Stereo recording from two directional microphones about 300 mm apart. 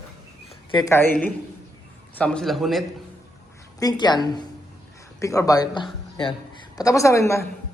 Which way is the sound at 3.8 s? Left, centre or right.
Centre.